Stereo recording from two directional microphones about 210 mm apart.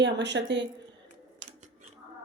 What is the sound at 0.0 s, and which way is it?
Speech, 55° right (ahead or behind).